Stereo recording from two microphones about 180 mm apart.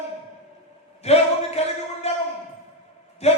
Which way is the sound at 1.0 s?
35° left (ahead or behind).